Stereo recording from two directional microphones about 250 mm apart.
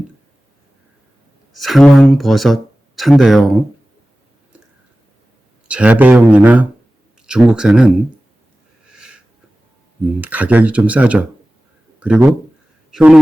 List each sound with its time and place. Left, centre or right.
1.5 s speech: centre
5.6 s speech: centre
9.0 s wheeze: centre
10.2 s speech: centre